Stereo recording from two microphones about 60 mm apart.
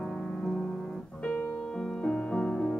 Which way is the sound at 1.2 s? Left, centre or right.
Centre.